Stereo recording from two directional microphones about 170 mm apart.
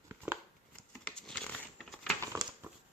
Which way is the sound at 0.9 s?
10° left (ahead or behind).